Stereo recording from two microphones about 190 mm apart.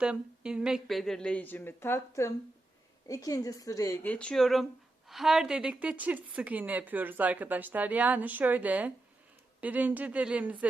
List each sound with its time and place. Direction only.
0.0 s a woman's voice: 5° right (ahead or behind)